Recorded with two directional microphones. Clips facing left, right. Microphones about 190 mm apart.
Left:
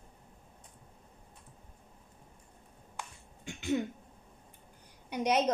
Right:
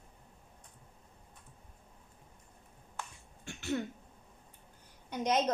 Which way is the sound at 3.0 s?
15° left (ahead or behind).